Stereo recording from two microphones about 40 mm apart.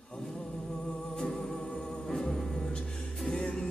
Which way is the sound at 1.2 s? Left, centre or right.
Centre.